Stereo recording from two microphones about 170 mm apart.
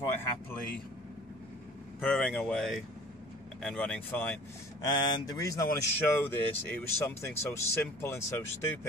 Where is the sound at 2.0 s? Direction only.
5° left (ahead or behind).